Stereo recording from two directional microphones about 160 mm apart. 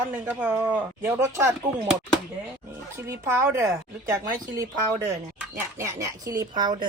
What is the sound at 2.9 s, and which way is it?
A woman's voice, 15° right (ahead or behind).